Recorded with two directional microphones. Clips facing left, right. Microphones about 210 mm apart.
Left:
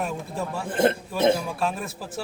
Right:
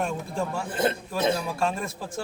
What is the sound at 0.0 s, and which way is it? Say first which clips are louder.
A man's voice: right 1 dB; 5° left (ahead or behind).